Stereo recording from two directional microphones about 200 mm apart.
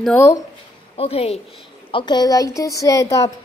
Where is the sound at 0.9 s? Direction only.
30° left (ahead or behind).